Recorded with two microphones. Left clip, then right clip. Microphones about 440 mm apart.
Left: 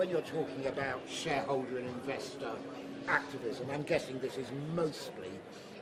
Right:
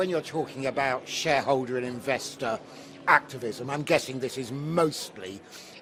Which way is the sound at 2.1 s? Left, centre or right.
Right.